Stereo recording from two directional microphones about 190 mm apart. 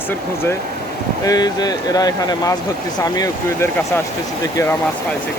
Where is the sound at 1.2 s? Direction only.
20° left (ahead or behind).